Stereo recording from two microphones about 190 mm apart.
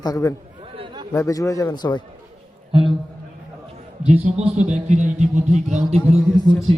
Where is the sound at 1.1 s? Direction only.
15° left (ahead or behind).